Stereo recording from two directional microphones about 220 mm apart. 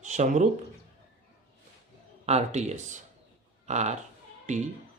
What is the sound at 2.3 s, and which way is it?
Speech, 30° right (ahead or behind).